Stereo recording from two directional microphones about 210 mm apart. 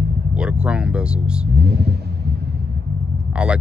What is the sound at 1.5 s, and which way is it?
Speech, 50° right (ahead or behind).